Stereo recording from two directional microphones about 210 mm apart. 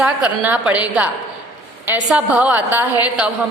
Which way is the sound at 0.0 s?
5° right (ahead or behind).